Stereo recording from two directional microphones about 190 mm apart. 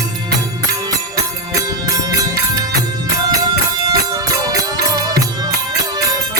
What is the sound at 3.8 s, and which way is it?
Music, 20° right (ahead or behind).